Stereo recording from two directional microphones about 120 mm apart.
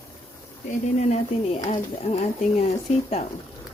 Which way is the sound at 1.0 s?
70° left (ahead or behind).